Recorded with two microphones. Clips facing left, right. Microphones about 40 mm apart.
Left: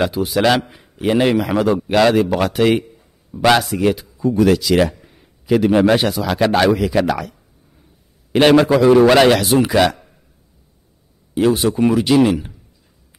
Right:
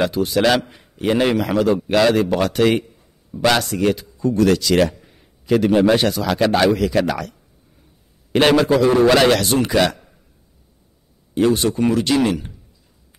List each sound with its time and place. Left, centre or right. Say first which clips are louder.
0.0 s a man's voice: left 1 dB; centre
8.7 s a man's voice: left 3 dB; left
9.1 s a man's voice: left 3 dB; centre
11.3 s a man's voice: left 1 dB; centre